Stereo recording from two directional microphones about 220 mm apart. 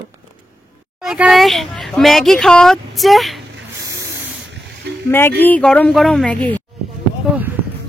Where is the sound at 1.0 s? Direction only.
5° right (ahead or behind).